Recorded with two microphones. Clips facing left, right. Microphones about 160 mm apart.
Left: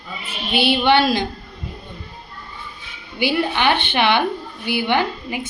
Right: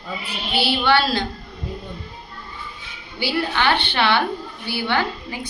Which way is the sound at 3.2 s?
20° left (ahead or behind).